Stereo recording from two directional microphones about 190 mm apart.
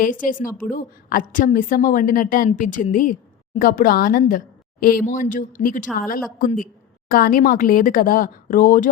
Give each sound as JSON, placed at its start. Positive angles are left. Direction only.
{"t": 0.0, "sound": "a woman's voice", "side_deg": 45}